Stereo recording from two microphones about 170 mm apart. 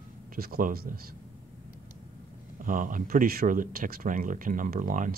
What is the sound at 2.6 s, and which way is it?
Speech, 55° right (ahead or behind).